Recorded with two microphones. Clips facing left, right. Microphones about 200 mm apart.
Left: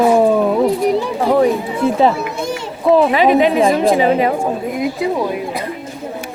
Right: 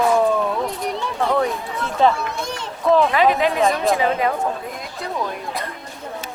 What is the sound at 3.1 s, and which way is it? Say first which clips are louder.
A woman's voice: left 6 dB; 20° left (ahead or behind).